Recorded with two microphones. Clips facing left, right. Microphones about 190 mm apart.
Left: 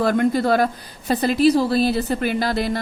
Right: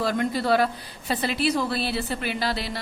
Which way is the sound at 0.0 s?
55° left (ahead or behind).